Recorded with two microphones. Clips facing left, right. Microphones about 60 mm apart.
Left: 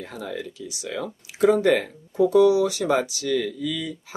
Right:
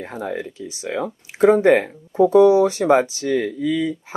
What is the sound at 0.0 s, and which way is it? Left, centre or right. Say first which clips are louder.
Speech: right 5 dB; right.